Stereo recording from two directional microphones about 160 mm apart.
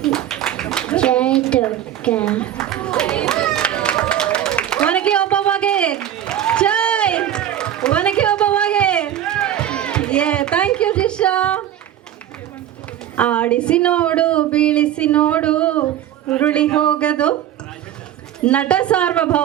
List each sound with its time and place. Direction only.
0.0 s a sound: 5° left (ahead or behind)
13.1 s speech: 10° left (ahead or behind)
18.3 s speech: 5° left (ahead or behind)